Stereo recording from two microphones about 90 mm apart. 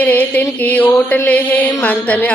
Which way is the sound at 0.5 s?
15° left (ahead or behind).